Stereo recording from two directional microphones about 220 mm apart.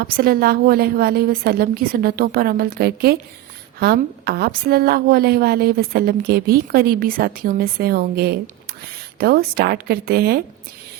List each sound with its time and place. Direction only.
0.0 s a woman's voice: 45° right (ahead or behind)